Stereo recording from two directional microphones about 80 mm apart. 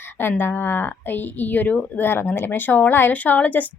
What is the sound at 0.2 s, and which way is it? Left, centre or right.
A woman's voice, left.